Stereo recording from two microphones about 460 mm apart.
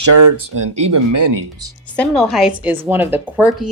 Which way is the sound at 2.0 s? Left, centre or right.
Centre.